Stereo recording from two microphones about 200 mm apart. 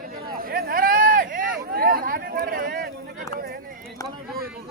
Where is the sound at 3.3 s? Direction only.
50° right (ahead or behind).